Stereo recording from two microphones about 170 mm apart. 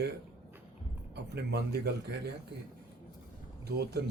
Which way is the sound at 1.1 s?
80° right.